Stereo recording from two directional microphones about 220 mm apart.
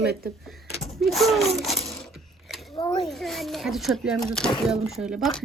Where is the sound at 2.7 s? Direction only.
25° left (ahead or behind).